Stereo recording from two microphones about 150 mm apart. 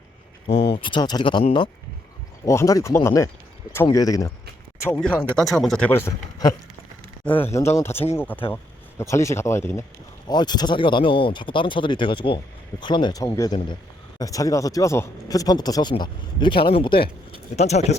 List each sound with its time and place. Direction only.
0.7 s speech: 35° left (ahead or behind)
2.4 s speech: 20° left (ahead or behind)
5.4 s speech: 5° left (ahead or behind)
10.2 s speech: 30° left (ahead or behind)
17.6 s speech: 45° left (ahead or behind)